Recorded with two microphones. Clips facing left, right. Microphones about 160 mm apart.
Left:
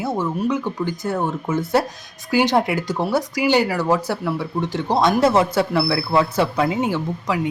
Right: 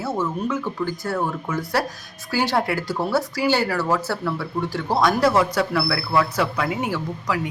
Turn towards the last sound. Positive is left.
turn(degrees=25)  # may be behind; listen again after turning